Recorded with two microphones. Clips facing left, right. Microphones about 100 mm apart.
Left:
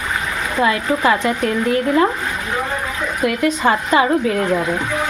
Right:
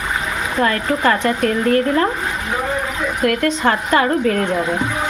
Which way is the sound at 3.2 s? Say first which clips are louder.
Even; 5° left (ahead or behind).